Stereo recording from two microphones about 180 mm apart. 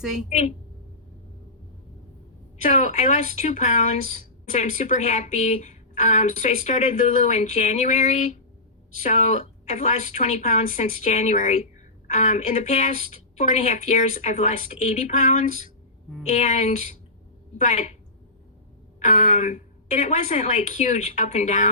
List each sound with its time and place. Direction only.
0.0 s a woman's voice: centre (ahead or behind)
0.3 s speech: 40° left (ahead or behind)
2.6 s a woman's voice: 45° left (ahead or behind)
18.9 s speech: 40° left (ahead or behind)